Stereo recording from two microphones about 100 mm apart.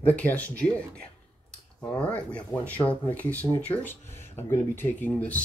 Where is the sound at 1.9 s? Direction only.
10° left (ahead or behind).